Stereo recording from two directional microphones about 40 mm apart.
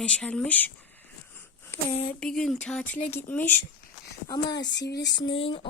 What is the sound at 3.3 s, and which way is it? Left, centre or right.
Speech, left.